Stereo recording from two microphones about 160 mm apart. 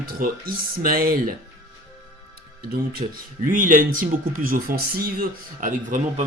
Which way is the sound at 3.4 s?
55° right (ahead or behind).